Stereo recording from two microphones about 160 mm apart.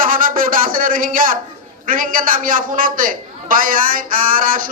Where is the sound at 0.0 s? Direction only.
60° right (ahead or behind).